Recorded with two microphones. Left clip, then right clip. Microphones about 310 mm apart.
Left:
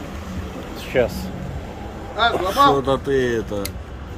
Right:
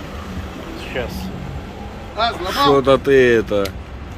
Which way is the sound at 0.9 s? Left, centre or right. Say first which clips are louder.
Left 7 dB; left.